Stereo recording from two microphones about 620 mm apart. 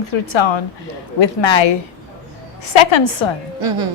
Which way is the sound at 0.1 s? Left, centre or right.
Left.